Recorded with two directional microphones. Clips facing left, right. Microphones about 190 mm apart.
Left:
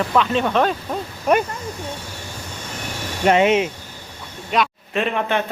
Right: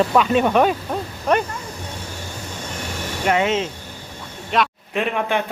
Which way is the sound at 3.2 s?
20° left (ahead or behind).